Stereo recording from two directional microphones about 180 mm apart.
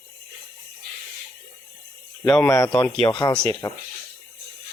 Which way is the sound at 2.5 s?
20° left (ahead or behind).